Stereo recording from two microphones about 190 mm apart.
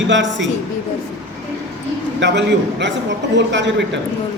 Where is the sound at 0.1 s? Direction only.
70° right (ahead or behind).